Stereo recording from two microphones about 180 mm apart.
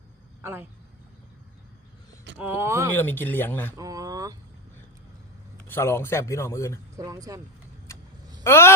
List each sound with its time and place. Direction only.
2.4 s speech: 10° right (ahead or behind)
2.9 s speech: 10° left (ahead or behind)
3.8 s a sound: 20° right (ahead or behind)
5.6 s speech: 15° left (ahead or behind)
6.9 s speech: 20° right (ahead or behind)
8.4 s speech: 15° left (ahead or behind)